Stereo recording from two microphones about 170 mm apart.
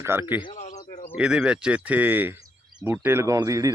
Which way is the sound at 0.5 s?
45° left (ahead or behind).